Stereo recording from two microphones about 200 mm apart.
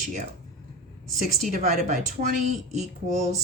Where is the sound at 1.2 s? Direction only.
40° right (ahead or behind).